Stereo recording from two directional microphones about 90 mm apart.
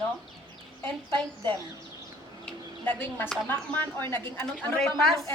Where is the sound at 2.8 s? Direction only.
20° left (ahead or behind).